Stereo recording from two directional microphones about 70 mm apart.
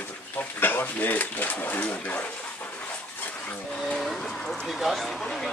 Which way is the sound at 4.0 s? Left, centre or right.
Centre.